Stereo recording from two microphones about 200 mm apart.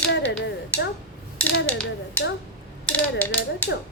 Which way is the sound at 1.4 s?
5° left (ahead or behind).